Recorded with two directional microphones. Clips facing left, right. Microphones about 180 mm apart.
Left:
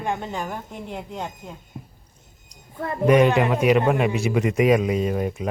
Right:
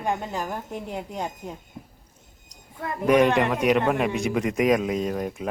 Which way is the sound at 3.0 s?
Centre (ahead or behind).